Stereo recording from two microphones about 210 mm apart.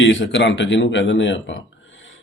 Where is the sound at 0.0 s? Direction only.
65° left (ahead or behind).